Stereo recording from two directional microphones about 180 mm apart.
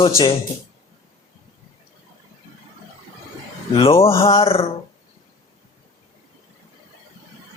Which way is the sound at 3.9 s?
15° left (ahead or behind).